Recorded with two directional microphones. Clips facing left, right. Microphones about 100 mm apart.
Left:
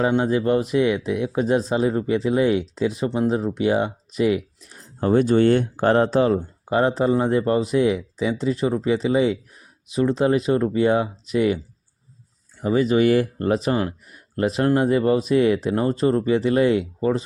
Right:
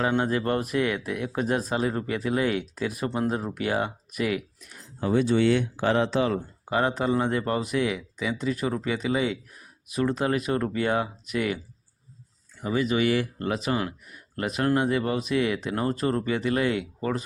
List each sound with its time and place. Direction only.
0.0 s speech: 20° left (ahead or behind)
4.9 s speech: 45° left (ahead or behind); by 11.6 s 25° left (ahead or behind)
12.6 s speech: 35° left (ahead or behind)